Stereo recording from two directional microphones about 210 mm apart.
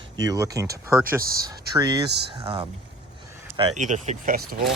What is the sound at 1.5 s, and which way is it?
Speech, 15° right (ahead or behind).